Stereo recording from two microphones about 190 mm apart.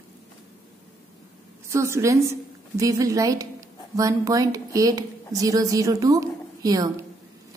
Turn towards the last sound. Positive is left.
turn(degrees=-20)  # may be behind; listen again after turning